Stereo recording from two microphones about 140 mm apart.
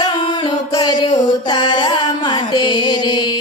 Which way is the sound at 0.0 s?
30° left (ahead or behind).